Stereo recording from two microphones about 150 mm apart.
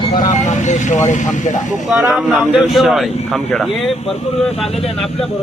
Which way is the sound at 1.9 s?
5° right (ahead or behind).